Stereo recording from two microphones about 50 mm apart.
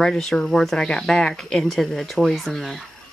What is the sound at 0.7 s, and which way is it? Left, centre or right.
Speech, centre.